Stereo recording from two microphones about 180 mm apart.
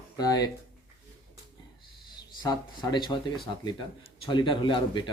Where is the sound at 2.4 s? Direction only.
25° left (ahead or behind).